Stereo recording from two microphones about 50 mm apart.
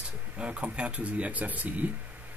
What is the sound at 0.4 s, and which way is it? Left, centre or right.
Speech, right.